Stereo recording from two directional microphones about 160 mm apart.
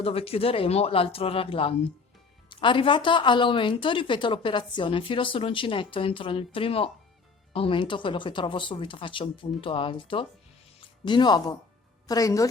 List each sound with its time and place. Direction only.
0.0 s speech: 40° left (ahead or behind); by 12.5 s 20° left (ahead or behind)